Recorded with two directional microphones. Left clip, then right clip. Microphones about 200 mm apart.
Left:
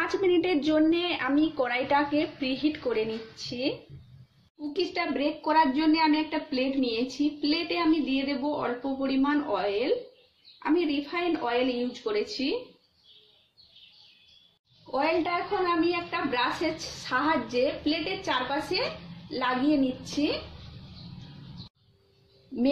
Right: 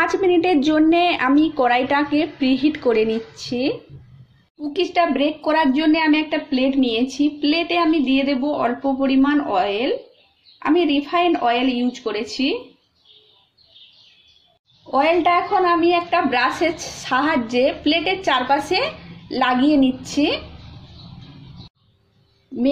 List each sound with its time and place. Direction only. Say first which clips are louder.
0.0 s a woman's voice: right 8 dB; 30° right (ahead or behind)
4.7 s a woman's voice: right 11 dB; 40° right (ahead or behind)
14.9 s a woman's voice: right 10 dB; 40° right (ahead or behind)